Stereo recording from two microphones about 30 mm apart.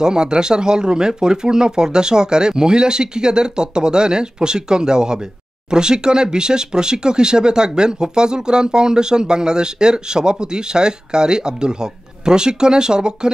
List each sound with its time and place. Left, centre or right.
0.0 s speech: right